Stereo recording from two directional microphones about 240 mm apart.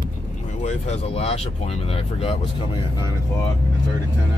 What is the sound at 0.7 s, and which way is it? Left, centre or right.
Speech, left.